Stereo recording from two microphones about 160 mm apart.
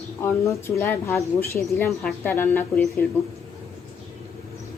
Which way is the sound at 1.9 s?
Centre (ahead or behind).